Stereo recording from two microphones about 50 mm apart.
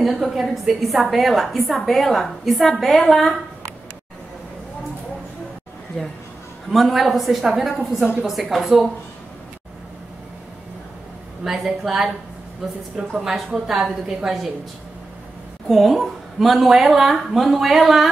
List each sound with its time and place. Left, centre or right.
0.0 s a woman's voice: centre
6.0 s a woman's voice: centre
11.4 s a woman's voice: centre
13.2 s a woman's voice: centre
14.0 s a woman's voice: centre
15.7 s a woman's voice: centre